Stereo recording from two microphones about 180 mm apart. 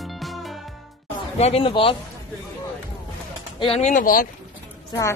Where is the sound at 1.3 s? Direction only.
35° left (ahead or behind).